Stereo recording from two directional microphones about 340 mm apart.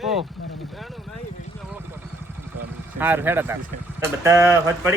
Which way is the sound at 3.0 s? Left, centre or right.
Centre.